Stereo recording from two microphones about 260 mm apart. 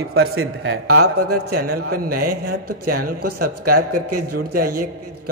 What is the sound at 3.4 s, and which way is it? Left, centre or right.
Speech, right.